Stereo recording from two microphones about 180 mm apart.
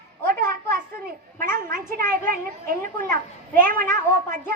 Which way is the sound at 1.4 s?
55° right (ahead or behind).